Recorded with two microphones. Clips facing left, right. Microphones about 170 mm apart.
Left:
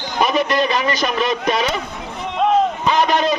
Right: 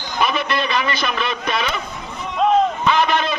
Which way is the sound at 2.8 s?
40° left (ahead or behind).